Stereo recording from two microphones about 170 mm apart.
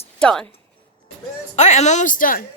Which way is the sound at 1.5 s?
45° left (ahead or behind).